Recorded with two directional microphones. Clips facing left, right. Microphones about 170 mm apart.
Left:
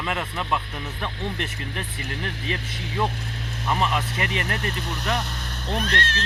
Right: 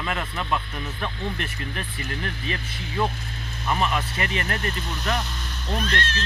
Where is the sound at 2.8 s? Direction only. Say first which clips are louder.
Right 1 dB; 85° left; by 6.2 s 70° left (ahead or behind).